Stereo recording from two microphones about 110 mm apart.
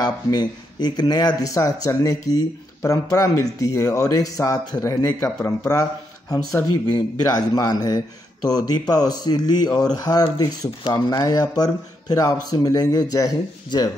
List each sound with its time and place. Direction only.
0.0 s speech: 40° left (ahead or behind)